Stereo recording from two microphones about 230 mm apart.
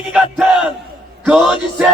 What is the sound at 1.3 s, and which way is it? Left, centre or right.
Music, centre.